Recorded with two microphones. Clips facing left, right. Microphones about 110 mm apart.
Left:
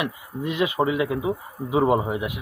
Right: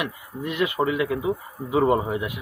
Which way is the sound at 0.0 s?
20° left (ahead or behind).